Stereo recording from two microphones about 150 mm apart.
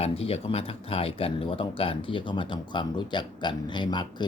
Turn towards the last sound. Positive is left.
turn(degrees=30)  # may be behind; listen again after turning